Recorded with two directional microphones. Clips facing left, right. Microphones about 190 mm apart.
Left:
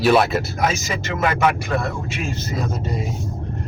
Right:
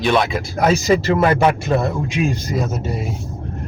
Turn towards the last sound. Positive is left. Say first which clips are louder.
# right 2 dB
turn(degrees=-5)  # may be behind; listen again after turning